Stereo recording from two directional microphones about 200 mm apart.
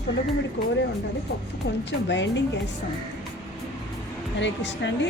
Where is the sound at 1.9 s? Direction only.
65° left (ahead or behind).